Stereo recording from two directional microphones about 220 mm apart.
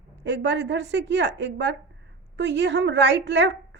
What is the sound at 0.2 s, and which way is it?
A woman's voice, 50° right (ahead or behind).